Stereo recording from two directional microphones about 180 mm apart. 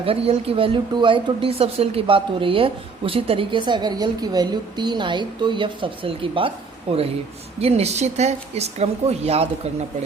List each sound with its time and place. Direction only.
0.0 s a woman's voice: 30° right (ahead or behind)
7.6 s speech: 35° right (ahead or behind)